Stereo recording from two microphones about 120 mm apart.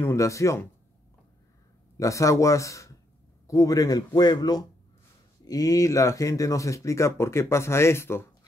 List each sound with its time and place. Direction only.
0.0 s speech: 25° left (ahead or behind)
2.0 s speech: 25° left (ahead or behind)